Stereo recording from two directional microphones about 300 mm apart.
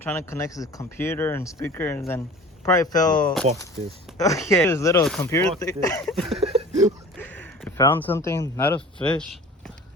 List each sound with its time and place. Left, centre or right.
0.0 s speech: centre
4.2 s speech: centre
6.4 s a sound: right
7.2 s speech: centre